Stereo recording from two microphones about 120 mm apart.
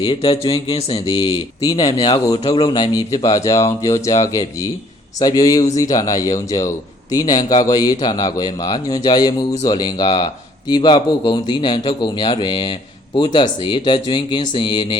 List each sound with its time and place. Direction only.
0.0 s speech: 45° left (ahead or behind)
1.6 s a man's voice: 35° left (ahead or behind)